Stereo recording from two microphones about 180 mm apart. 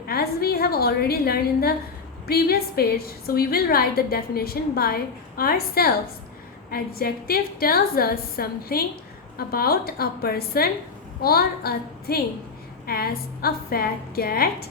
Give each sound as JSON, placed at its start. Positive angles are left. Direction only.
{"t": 0.1, "sound": "a woman's voice", "side_deg": 60}